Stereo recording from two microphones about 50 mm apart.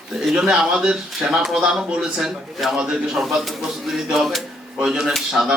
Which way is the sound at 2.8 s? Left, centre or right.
Centre.